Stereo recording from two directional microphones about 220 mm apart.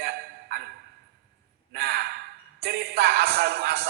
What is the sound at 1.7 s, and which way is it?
Speech, 45° right (ahead or behind).